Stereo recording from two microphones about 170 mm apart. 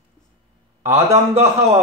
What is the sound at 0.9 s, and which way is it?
Speech, 40° right (ahead or behind).